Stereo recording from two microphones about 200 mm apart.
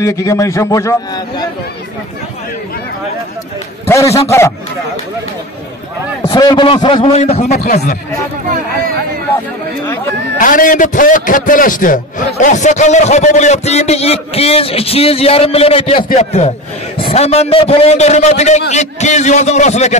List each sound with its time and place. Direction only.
0.0 s a man's voice: 15° left (ahead or behind)
6.2 s a man's voice: 20° left (ahead or behind)
7.6 s speech: 45° left (ahead or behind)
10.4 s a man's voice: 40° left (ahead or behind)